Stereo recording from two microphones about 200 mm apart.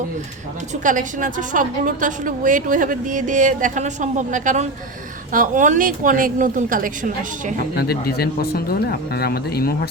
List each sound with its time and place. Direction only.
0.9 s a woman's voice: 40° right (ahead or behind)
7.8 s speech: 50° left (ahead or behind)